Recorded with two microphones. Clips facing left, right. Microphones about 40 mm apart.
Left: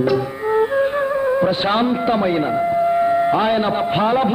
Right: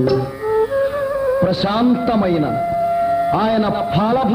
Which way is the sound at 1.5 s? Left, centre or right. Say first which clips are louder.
Right 2 dB; left.